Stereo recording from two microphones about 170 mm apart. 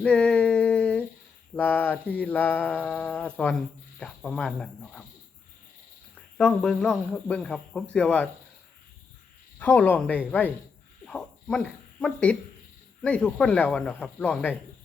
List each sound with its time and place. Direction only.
0.0 s female singing: 5° left (ahead or behind)
1.5 s mantra: 10° left (ahead or behind)
4.0 s speech: 5° left (ahead or behind)
6.3 s speech: 5° left (ahead or behind)
9.6 s mantra: 10° left (ahead or behind)
11.0 s speech: 5° left (ahead or behind)
13.0 s mantra: 5° left (ahead or behind)